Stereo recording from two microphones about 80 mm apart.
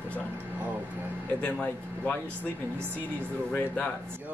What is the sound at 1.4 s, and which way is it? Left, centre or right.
Speech, centre.